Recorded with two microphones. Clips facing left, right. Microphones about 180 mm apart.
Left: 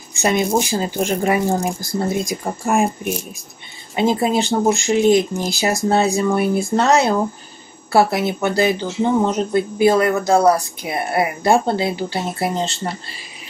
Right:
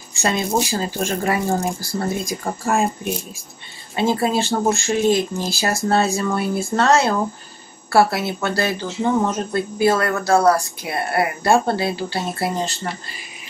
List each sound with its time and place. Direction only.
0.1 s speech: 20° left (ahead or behind)
3.9 s speech: 20° left (ahead or behind)